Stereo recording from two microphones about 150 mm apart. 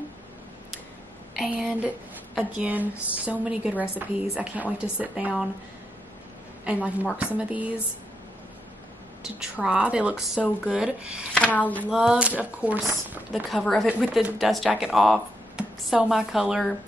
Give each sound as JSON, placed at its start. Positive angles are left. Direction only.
{"t": 1.4, "sound": "speech", "side_deg": -5}
{"t": 6.6, "sound": "speech", "side_deg": -10}
{"t": 9.2, "sound": "speech", "side_deg": -5}
{"t": 11.3, "sound": "speech", "side_deg": 10}
{"t": 11.9, "sound": "speech", "side_deg": -5}
{"t": 13.3, "sound": "speech", "side_deg": 0}